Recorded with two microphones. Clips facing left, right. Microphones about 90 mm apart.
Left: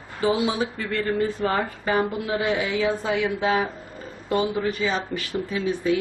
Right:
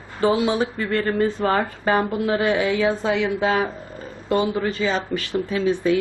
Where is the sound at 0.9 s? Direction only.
50° right (ahead or behind).